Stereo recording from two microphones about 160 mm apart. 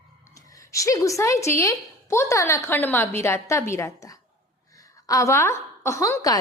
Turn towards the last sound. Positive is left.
turn(degrees=20)  # may be behind; listen again after turning